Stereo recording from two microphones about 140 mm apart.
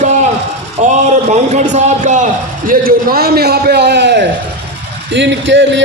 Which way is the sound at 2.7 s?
90° right.